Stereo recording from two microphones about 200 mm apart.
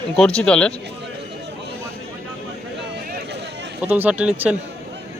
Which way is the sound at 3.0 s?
55° right (ahead or behind).